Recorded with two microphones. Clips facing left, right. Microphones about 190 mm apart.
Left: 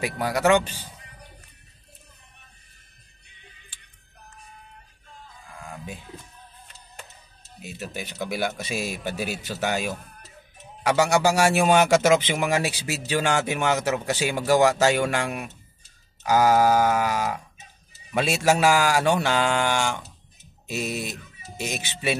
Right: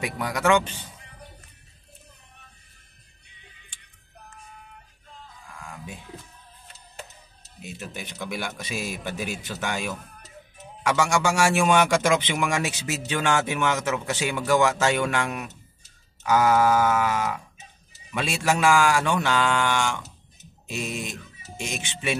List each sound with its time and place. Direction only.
0.2 s a man's voice: 35° left (ahead or behind)
8.2 s a man's voice: 45° left (ahead or behind)